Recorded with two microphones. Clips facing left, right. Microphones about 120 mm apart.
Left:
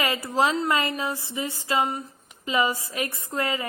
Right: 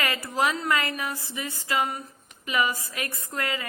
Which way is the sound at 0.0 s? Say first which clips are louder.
Left 3 dB; 25° left (ahead or behind).